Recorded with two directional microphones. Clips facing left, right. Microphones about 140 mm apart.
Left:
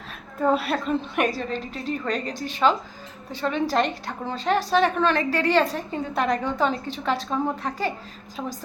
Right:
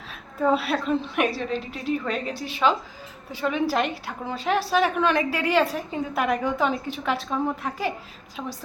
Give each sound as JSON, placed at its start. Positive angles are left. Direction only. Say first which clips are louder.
{"t": 0.3, "sound": "a woman's voice", "louder": "even", "side_deg": 0}